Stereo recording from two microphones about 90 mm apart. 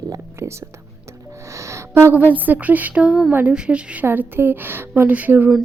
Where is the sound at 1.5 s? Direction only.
35° right (ahead or behind).